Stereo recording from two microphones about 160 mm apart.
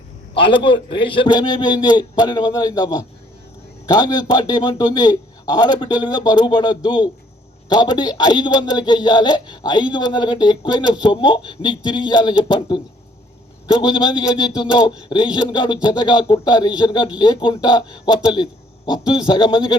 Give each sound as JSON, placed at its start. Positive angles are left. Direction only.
{"t": 0.3, "sound": "a man's voice", "side_deg": 30}
{"t": 15.4, "sound": "a man's voice", "side_deg": 30}